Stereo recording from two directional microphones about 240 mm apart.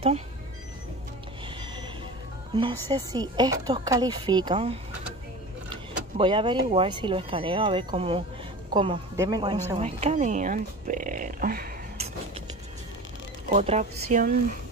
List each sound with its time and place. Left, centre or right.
2.9 s speech: centre
6.1 s a woman's voice: centre; by 11.7 s right
13.5 s a woman's voice: right